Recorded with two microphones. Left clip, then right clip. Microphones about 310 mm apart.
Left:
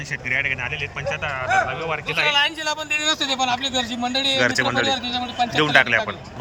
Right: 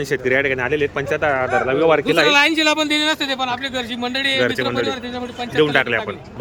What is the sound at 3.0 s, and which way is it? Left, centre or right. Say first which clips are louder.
A man's voice: right 2 dB; centre.